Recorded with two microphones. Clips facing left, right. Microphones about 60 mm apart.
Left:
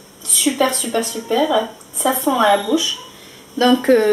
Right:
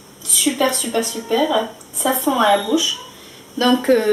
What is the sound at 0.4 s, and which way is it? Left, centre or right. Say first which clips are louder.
A woman's voice: left 1 dB; centre.